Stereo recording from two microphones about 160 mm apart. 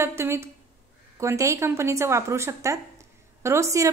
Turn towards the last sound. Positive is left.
turn(degrees=-20)  # may be behind; listen again after turning